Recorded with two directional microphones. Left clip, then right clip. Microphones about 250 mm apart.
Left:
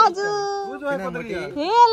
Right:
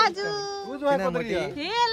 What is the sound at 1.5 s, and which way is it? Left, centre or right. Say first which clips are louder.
Speech: left 13 dB; centre.